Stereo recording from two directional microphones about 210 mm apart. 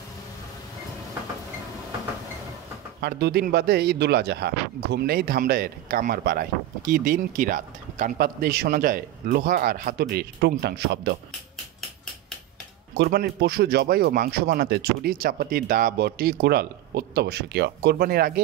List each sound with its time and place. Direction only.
3.0 s a man's voice: 50° right (ahead or behind)
12.9 s a man's voice: 45° right (ahead or behind)